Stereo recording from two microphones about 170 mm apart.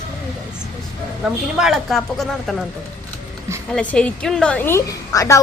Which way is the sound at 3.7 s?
5° left (ahead or behind).